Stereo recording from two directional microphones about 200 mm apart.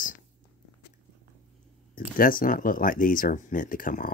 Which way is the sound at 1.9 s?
45° left (ahead or behind).